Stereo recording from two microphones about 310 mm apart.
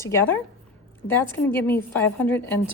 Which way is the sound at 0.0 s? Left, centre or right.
Centre.